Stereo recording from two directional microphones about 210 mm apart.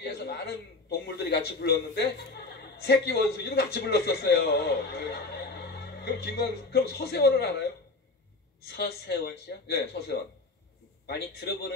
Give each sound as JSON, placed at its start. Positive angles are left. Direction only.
{"t": 0.0, "sound": "a man's voice", "side_deg": 50}
{"t": 8.7, "sound": "speech", "side_deg": 50}